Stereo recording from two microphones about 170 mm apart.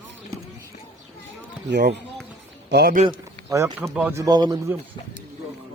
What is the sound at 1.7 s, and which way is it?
Speech, 90° right.